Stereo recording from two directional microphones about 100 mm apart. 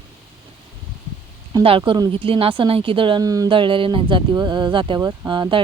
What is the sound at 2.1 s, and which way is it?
Speech, 65° right (ahead or behind).